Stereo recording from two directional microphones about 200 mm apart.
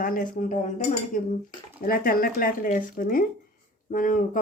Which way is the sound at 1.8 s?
45° left (ahead or behind).